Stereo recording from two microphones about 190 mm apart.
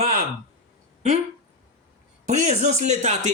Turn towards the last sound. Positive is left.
turn(degrees=-40)  # may be behind; listen again after turning